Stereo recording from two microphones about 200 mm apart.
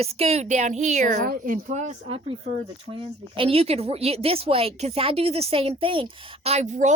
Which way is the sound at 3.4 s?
30° right (ahead or behind).